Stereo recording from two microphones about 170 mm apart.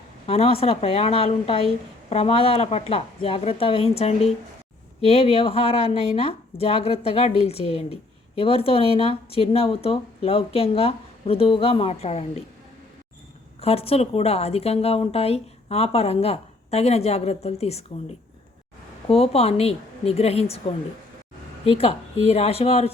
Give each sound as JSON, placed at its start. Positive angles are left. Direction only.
{"t": 0.3, "sound": "a woman's voice", "side_deg": 35}
{"t": 13.6, "sound": "a woman's voice", "side_deg": 35}
{"t": 19.0, "sound": "a woman's voice", "side_deg": 35}
{"t": 21.6, "sound": "a woman's voice", "side_deg": 35}